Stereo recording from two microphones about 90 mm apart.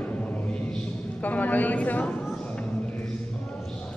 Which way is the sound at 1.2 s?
20° left (ahead or behind).